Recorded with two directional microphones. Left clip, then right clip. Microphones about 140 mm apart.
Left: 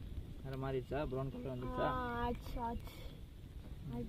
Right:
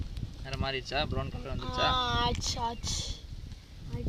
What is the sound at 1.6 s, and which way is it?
Speech, 35° right (ahead or behind).